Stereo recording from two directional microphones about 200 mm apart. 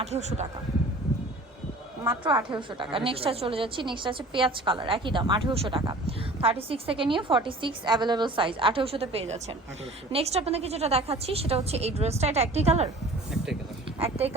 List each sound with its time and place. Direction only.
0.0 s a woman's voice: 35° right (ahead or behind)
2.6 s a woman's voice: 25° right (ahead or behind)
13.3 s speech: centre (ahead or behind)
14.0 s a woman's voice: 30° right (ahead or behind)